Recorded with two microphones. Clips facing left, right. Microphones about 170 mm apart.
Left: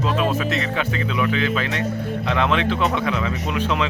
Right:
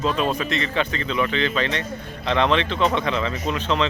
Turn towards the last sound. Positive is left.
turn(degrees=5)  # may be behind; listen again after turning